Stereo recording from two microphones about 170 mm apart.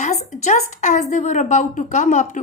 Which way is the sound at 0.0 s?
40° left (ahead or behind).